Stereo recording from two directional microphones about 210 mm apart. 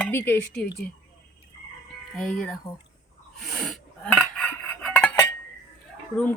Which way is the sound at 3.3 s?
Centre (ahead or behind).